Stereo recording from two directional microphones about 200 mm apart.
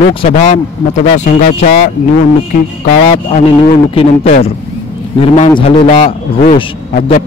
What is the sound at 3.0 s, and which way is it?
A man's voice, 30° left (ahead or behind).